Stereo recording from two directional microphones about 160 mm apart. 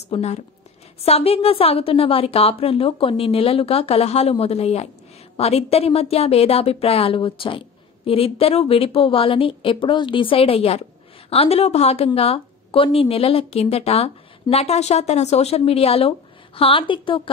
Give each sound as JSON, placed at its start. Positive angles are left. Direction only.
{"t": 0.1, "sound": "a woman's voice", "side_deg": 40}